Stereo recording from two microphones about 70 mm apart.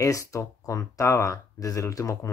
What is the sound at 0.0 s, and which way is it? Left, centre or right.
Speech, left.